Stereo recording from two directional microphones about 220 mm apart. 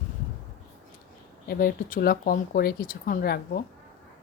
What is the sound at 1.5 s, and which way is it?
Speech, 40° left (ahead or behind).